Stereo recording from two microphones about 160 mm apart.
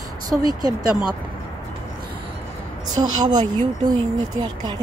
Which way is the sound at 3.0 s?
25° right (ahead or behind).